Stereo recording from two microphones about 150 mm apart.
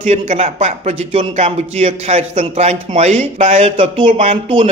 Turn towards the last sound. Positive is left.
turn(degrees=-40)  # may be behind; listen again after turning